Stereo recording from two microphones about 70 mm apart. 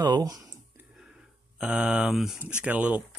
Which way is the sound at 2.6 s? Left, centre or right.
Centre.